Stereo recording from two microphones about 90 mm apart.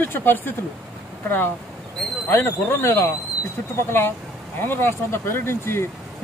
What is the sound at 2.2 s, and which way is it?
Speech, 25° left (ahead or behind).